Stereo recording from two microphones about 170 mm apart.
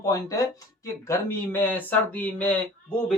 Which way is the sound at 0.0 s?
20° left (ahead or behind).